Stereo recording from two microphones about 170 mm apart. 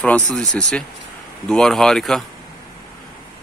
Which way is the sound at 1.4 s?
5° left (ahead or behind).